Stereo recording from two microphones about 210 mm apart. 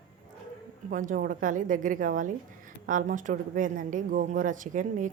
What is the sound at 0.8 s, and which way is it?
A woman's voice, 40° right (ahead or behind).